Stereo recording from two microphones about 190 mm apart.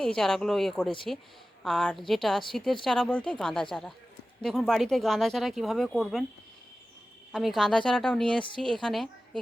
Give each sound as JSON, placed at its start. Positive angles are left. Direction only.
{"t": 0.0, "sound": "speech", "side_deg": 5}
{"t": 7.3, "sound": "a woman's voice", "side_deg": 0}